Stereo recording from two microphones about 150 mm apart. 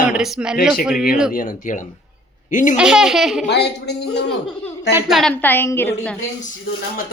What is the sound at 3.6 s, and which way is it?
Speech, 90° left.